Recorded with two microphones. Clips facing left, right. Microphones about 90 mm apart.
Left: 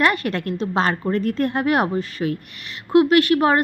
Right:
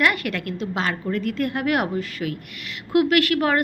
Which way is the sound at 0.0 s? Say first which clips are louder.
Left 2 dB; 30° left (ahead or behind).